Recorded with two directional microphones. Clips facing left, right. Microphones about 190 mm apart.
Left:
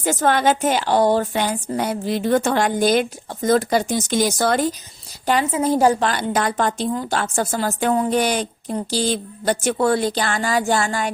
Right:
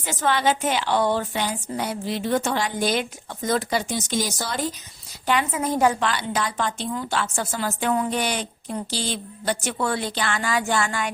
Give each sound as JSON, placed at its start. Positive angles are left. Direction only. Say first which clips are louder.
{"t": 0.0, "sound": "a woman's voice", "louder": "left 5 dB", "side_deg": 45}
{"t": 5.2, "sound": "a woman's voice", "louder": "left 4 dB", "side_deg": 35}